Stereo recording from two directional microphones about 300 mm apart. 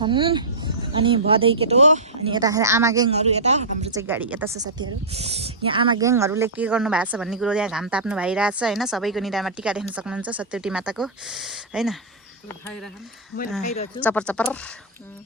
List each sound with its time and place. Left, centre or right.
0.0 s speech: centre
2.4 s speech: centre
3.9 s speech: centre
5.1 s speech: centre
13.3 s speech: left
14.0 s speech: centre